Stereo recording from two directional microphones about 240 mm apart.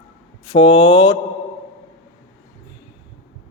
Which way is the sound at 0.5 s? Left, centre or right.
Left.